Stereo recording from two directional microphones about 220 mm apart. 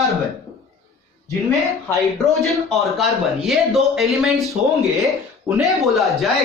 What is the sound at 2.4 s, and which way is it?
Speech, centre (ahead or behind).